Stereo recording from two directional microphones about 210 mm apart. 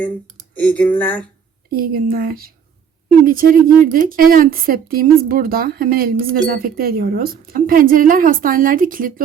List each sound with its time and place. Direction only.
0.5 s speech: 5° left (ahead or behind)
2.0 s speech: 45° right (ahead or behind)